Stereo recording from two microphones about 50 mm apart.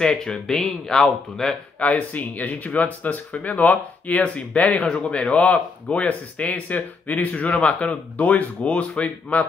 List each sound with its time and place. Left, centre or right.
0.0 s speech: centre
1.8 s speech: left
5.3 s speech: left